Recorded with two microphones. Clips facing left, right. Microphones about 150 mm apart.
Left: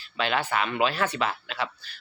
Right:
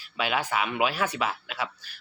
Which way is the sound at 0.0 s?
10° right (ahead or behind).